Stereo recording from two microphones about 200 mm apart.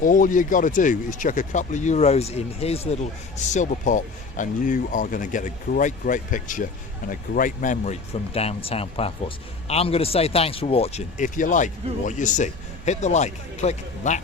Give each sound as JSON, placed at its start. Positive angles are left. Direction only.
{"t": 0.0, "sound": "speech", "side_deg": 40}